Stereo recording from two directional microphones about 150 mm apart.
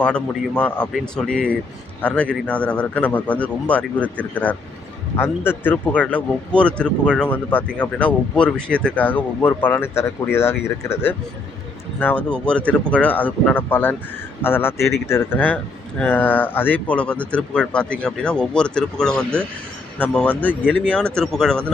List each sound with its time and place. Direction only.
0.0 s speech: 10° left (ahead or behind)